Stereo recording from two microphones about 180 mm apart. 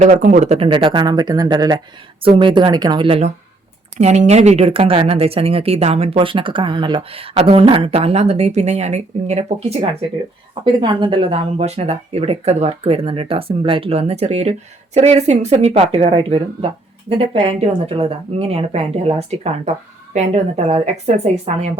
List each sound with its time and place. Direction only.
0.0 s speech: 45° right (ahead or behind)
10.5 s speech: 25° right (ahead or behind)